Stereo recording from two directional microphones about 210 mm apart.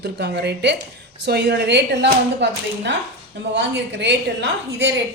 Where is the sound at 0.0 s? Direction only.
50° right (ahead or behind).